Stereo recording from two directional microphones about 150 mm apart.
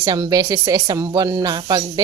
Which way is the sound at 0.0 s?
25° right (ahead or behind).